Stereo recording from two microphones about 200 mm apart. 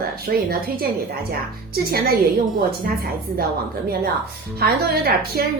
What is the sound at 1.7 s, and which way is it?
Speech, 50° right (ahead or behind).